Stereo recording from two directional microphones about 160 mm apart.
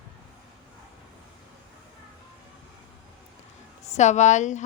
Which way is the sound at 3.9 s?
45° left (ahead or behind).